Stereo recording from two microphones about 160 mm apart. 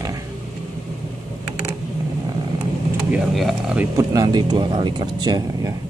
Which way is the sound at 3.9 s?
20° right (ahead or behind).